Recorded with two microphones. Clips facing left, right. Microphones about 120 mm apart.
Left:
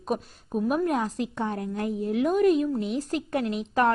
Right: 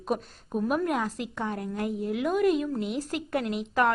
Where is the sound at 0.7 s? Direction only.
30° left (ahead or behind).